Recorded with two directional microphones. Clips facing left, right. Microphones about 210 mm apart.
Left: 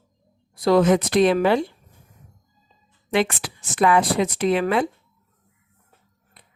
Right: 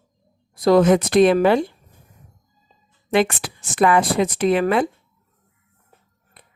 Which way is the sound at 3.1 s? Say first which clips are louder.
Right 3 dB; 50° right (ahead or behind).